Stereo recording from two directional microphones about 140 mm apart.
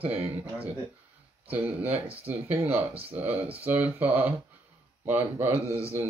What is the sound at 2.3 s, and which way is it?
Speech, 15° right (ahead or behind).